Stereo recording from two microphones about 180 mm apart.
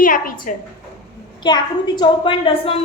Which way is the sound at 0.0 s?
50° left (ahead or behind).